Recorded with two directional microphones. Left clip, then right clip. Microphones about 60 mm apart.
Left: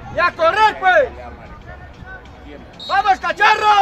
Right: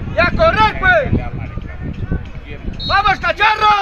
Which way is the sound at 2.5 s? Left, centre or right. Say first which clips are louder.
Right 4 dB; left.